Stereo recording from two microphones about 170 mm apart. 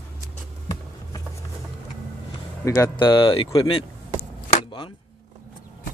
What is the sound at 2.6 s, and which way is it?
Speech, 20° left (ahead or behind).